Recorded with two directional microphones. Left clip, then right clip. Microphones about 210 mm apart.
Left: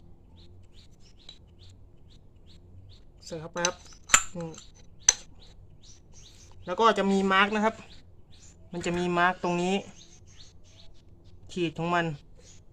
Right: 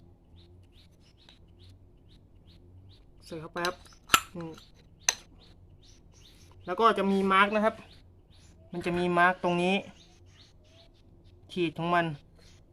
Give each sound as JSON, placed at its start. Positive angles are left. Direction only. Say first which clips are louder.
{"t": 3.2, "sound": "cutlery", "louder": "left 3 dB", "side_deg": 5}
{"t": 4.5, "sound": "a sound", "louder": "left 2 dB", "side_deg": -5}
{"t": 6.7, "sound": "speech", "louder": "left 1 dB", "side_deg": 5}
{"t": 8.7, "sound": "speech", "louder": "even", "side_deg": 0}
{"t": 11.4, "sound": "speech", "louder": "even", "side_deg": 0}